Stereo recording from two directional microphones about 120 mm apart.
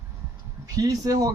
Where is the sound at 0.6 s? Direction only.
30° right (ahead or behind).